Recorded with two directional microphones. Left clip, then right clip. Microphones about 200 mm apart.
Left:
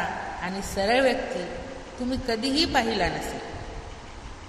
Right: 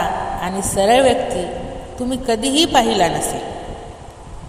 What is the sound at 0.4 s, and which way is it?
A woman's voice, 35° right (ahead or behind).